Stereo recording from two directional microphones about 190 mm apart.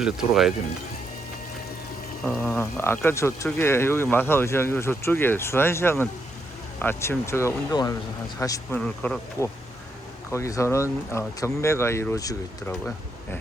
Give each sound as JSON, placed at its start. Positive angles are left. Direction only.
{"t": 0.0, "sound": "speech", "side_deg": 0}
{"t": 2.2, "sound": "speech", "side_deg": 5}
{"t": 8.8, "sound": "speech", "side_deg": 5}
{"t": 10.3, "sound": "speech", "side_deg": 15}